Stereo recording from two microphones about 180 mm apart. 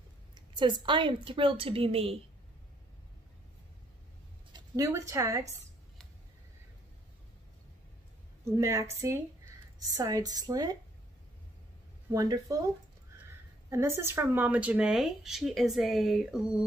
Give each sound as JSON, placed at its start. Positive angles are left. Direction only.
{"t": 0.3, "sound": "a woman's voice", "side_deg": -25}
{"t": 4.5, "sound": "a woman's voice", "side_deg": -20}
{"t": 8.5, "sound": "a woman's voice", "side_deg": -15}
{"t": 9.8, "sound": "a woman's voice", "side_deg": -20}
{"t": 12.1, "sound": "a woman's voice", "side_deg": -20}
{"t": 13.7, "sound": "speech", "side_deg": -15}